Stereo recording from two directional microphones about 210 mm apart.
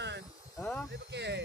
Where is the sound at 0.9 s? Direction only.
55° right (ahead or behind).